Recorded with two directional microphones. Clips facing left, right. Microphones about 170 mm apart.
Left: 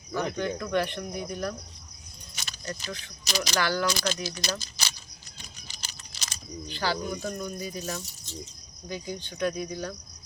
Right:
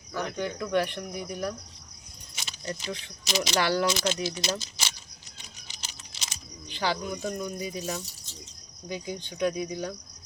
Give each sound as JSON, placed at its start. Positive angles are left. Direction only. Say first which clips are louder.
{"t": 0.3, "sound": "speech", "louder": "right 2 dB", "side_deg": -10}
{"t": 2.4, "sound": "speech", "louder": "right 2 dB", "side_deg": -25}
{"t": 5.4, "sound": "computer keyboard", "louder": "left 1 dB", "side_deg": -25}
{"t": 6.7, "sound": "speech", "louder": "even", "side_deg": -15}